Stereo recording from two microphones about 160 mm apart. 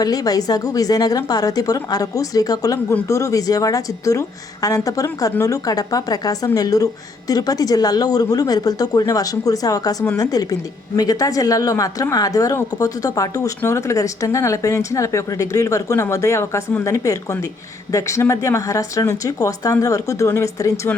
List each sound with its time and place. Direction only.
0.0 s a woman's voice: 25° left (ahead or behind)